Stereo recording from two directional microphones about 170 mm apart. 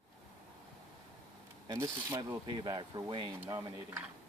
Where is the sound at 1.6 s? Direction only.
20° right (ahead or behind).